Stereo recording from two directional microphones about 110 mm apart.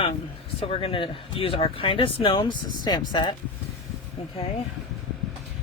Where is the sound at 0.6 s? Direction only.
60° left (ahead or behind); by 3.3 s 40° left (ahead or behind).